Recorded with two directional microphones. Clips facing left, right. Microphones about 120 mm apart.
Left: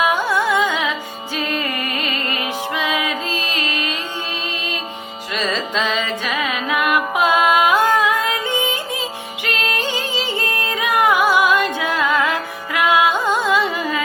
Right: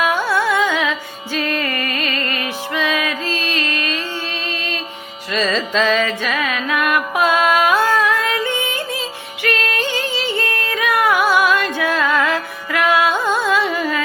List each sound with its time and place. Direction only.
0.0 s carnatic music: 20° left (ahead or behind)
1.5 s music: 15° left (ahead or behind)
5.3 s music: 15° left (ahead or behind)